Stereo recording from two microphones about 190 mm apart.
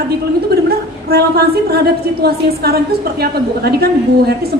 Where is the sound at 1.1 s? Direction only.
55° right (ahead or behind).